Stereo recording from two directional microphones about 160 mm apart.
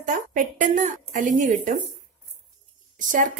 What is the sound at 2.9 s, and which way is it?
Speech, 55° right (ahead or behind).